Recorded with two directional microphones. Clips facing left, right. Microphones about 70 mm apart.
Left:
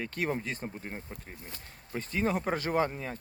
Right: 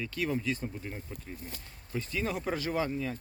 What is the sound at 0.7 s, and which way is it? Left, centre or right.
Speech, left.